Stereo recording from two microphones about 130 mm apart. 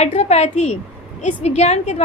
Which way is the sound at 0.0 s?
60° left (ahead or behind).